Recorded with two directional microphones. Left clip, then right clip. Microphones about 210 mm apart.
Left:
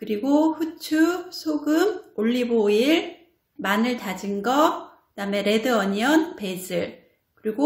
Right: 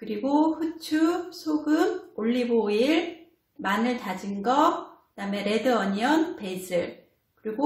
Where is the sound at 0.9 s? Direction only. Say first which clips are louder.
Left 3 dB; 35° left (ahead or behind).